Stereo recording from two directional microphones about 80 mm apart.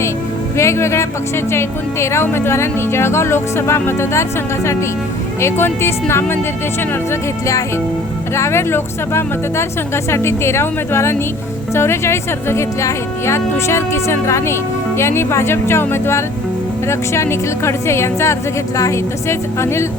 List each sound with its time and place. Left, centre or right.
0.5 s a woman's voice: left
7.1 s a woman's voice: left